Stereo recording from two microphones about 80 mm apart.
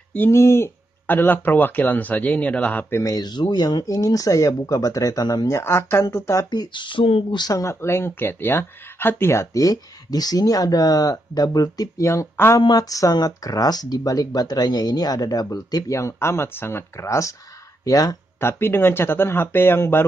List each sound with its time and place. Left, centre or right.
0.3 s speech: left; by 2.9 s centre
2.9 s speech: left
3.3 s speech: left
5.5 s speech: left
6.5 s speech: left
7.4 s speech: left
16.0 s speech: left
17.8 s speech: left
18.4 s speech: left